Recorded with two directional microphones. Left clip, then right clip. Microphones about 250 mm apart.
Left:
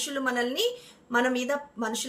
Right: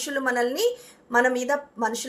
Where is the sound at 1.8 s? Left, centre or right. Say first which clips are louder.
Right 5 dB; centre.